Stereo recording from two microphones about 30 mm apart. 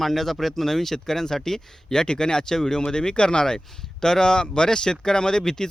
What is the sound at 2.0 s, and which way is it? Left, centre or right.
Speech, left.